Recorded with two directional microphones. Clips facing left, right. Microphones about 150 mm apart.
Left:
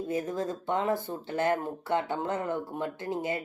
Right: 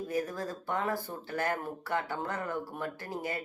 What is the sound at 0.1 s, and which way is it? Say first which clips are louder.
Speech: left 3 dB; 20° left (ahead or behind).